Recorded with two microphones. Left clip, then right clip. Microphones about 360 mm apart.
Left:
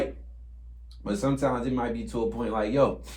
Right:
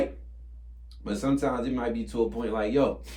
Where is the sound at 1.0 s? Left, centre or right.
Centre.